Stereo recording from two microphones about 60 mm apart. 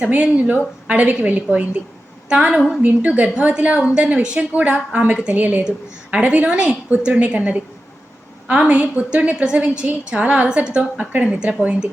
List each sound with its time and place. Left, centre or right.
0.0 s a woman's voice: right
4.4 s a woman's voice: right